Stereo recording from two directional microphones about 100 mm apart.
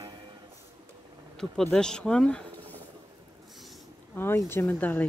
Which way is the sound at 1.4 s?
5° left (ahead or behind).